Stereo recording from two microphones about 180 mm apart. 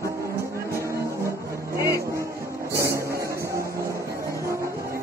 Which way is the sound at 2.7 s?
15° right (ahead or behind).